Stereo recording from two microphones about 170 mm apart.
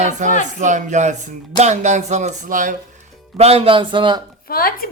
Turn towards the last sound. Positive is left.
turn(degrees=60)  # may be behind; listen again after turning